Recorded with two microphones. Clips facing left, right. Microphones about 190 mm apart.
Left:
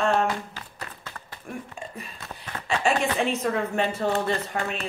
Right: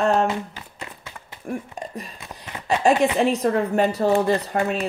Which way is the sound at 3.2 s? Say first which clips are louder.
Right 5 dB; 35° right (ahead or behind).